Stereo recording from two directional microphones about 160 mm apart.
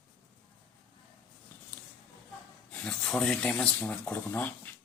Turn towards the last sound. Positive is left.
turn(degrees=10)  # may be behind; listen again after turning